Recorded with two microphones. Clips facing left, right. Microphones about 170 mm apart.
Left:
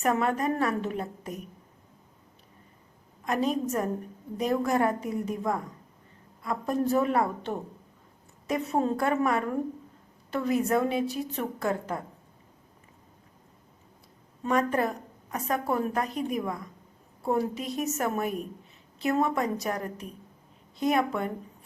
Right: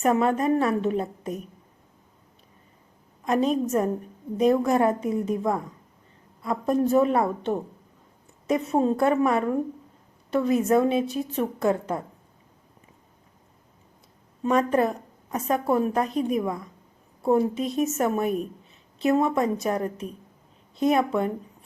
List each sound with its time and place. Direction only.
0.0 s a woman's voice: 25° right (ahead or behind)
3.2 s a woman's voice: 25° right (ahead or behind)
14.4 s a woman's voice: 20° right (ahead or behind)